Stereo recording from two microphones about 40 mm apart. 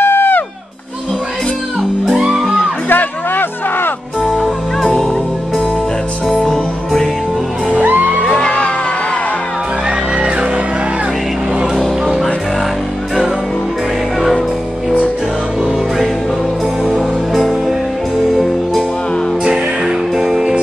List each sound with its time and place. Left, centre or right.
0.0 s music: left
2.1 s music: centre
2.9 s a sound: left
4.2 s music: centre
6.3 s music: centre
7.8 s music: right
8.4 s music: left
16.8 s music: centre
19.4 s music: centre